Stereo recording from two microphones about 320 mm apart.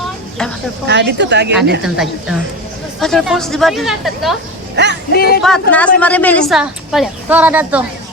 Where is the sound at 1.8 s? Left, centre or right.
Centre.